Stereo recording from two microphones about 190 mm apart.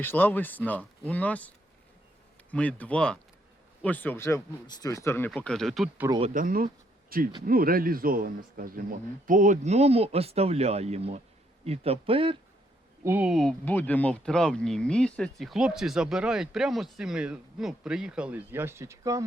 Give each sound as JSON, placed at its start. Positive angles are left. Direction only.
{"t": 0.0, "sound": "speech", "side_deg": 10}
{"t": 6.3, "sound": "speech", "side_deg": -50}
{"t": 13.1, "sound": "speech", "side_deg": -5}